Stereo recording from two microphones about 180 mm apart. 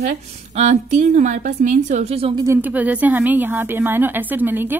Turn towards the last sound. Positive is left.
turn(degrees=-10)  # may be behind; listen again after turning